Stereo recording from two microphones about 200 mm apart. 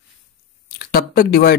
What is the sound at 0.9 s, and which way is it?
Speech, 50° left (ahead or behind).